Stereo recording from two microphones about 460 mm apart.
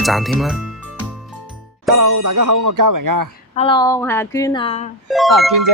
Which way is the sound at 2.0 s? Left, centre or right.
Right.